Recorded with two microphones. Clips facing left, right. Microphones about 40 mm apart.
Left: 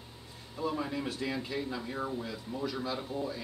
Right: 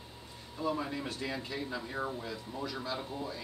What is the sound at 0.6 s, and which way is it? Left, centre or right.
Speech, centre.